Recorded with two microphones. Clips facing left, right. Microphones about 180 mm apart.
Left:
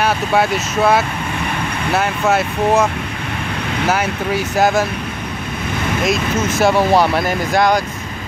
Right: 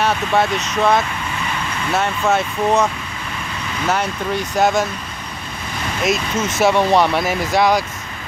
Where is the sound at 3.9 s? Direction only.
5° left (ahead or behind).